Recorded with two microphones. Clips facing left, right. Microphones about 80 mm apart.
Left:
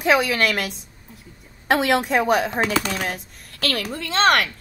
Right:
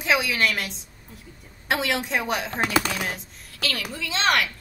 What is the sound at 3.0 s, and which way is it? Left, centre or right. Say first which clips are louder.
Speech: left 3 dB; left.